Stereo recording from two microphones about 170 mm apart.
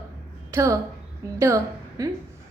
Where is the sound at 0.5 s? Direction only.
20° right (ahead or behind).